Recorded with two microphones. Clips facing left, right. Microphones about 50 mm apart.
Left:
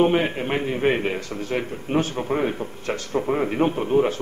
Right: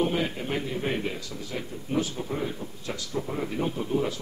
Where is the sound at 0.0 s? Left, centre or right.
Left.